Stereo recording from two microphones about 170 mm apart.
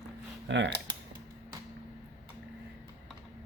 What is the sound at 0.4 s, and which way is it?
Speech, 90° right.